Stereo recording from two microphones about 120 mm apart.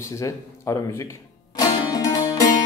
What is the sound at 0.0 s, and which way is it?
Speech, 25° left (ahead or behind).